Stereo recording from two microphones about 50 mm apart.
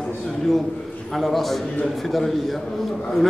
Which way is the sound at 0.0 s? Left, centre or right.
Centre.